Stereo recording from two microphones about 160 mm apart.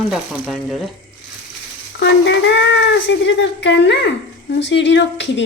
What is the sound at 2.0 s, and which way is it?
Speech, 90° left.